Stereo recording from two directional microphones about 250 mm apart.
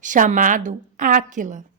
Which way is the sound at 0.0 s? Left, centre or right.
Right.